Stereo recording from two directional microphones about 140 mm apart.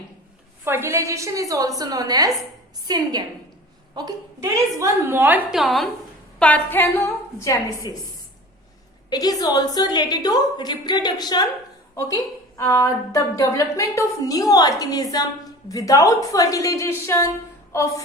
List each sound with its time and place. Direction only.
0.6 s a woman's voice: 15° right (ahead or behind)
5.5 s a woman's voice: centre (ahead or behind)
6.4 s a woman's voice: 10° left (ahead or behind)
9.0 s a woman's voice: 25° left (ahead or behind)
17.7 s music: 20° left (ahead or behind)